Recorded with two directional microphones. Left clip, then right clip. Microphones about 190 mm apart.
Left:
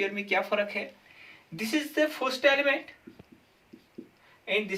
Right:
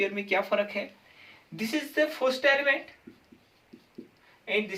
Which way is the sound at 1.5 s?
5° right (ahead or behind).